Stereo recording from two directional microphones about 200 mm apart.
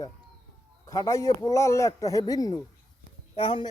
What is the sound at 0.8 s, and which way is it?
A man's voice, 15° left (ahead or behind).